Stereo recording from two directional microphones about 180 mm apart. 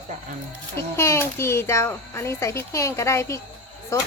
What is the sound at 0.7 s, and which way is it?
A child's voice, 15° left (ahead or behind).